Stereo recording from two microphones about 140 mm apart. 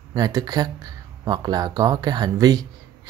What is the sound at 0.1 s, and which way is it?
Speech, 30° right (ahead or behind).